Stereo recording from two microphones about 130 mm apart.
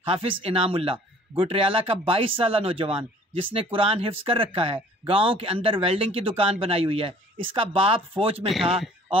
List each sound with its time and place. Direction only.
0.1 s speech: 45° right (ahead or behind)